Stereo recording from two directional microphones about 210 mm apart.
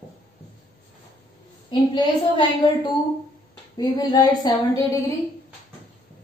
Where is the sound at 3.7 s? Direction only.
20° left (ahead or behind).